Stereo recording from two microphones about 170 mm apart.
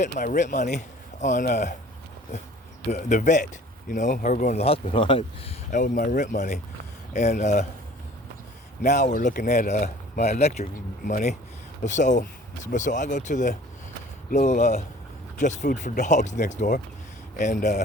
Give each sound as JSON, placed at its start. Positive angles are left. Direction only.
{"t": 0.0, "sound": "speech", "side_deg": 50}
{"t": 2.8, "sound": "speech", "side_deg": 45}
{"t": 5.7, "sound": "speech", "side_deg": 50}
{"t": 8.8, "sound": "speech", "side_deg": 45}